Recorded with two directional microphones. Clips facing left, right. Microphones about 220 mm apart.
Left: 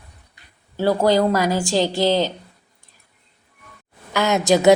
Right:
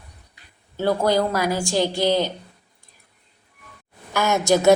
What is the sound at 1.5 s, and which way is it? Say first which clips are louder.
Speech: left 2 dB; 20° left (ahead or behind).